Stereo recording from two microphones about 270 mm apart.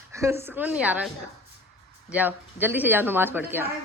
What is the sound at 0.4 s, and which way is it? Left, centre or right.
Speech, centre.